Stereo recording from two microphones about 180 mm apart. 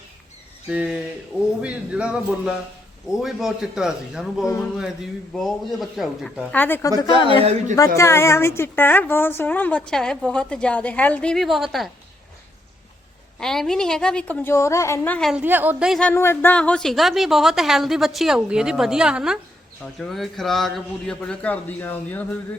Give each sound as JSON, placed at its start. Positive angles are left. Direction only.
{"t": 0.7, "sound": "a woman's voice", "side_deg": -5}
{"t": 4.4, "sound": "a woman's voice", "side_deg": 15}
{"t": 5.3, "sound": "a woman's voice", "side_deg": 0}
{"t": 6.5, "sound": "a woman's voice", "side_deg": 10}
{"t": 7.9, "sound": "a woman's voice", "side_deg": 15}
{"t": 13.4, "sound": "a woman's voice", "side_deg": 5}
{"t": 15.3, "sound": "a woman's voice", "side_deg": -10}